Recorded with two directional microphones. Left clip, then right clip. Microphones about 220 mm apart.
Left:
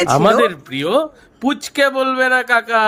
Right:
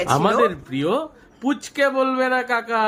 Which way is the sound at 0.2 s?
35° left (ahead or behind).